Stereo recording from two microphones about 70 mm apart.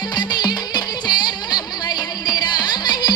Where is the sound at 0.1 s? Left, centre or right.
Left.